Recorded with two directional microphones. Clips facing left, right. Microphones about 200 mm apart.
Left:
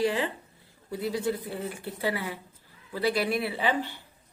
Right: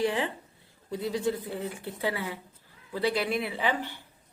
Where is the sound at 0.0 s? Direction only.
20° right (ahead or behind).